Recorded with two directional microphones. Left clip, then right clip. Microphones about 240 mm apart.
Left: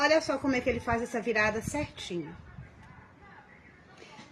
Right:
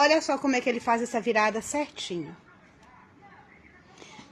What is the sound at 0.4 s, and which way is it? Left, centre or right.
A woman's voice, right.